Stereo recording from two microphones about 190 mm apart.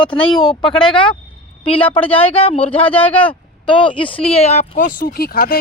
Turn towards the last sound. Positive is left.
turn(degrees=50)  # may be behind; listen again after turning